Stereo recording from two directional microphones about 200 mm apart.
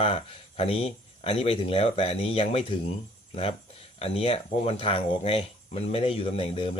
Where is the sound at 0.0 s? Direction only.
30° left (ahead or behind).